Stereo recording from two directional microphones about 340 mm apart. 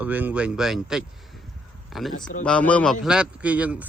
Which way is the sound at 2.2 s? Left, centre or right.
Centre.